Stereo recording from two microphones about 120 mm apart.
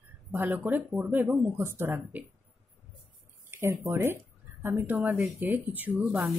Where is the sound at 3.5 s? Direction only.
20° right (ahead or behind).